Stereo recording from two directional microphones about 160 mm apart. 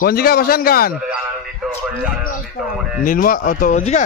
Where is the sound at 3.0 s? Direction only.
60° left (ahead or behind).